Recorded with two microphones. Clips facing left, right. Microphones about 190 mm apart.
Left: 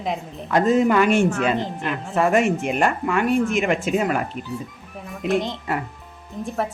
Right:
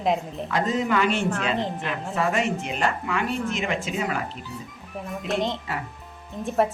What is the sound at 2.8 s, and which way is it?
Speech, 50° left (ahead or behind).